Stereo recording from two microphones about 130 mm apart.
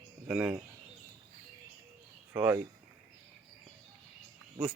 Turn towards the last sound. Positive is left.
turn(degrees=-25)  # may be behind; listen again after turning